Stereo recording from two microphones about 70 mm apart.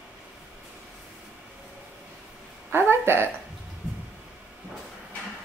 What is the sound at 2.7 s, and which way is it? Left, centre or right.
Speech, right.